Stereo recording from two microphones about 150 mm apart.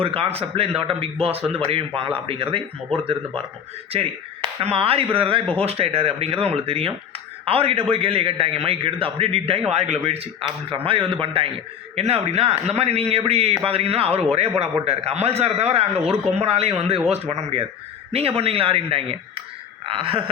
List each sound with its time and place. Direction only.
0.0 s a man's voice: 40° right (ahead or behind)
4.6 s a man's voice: 40° right (ahead or behind)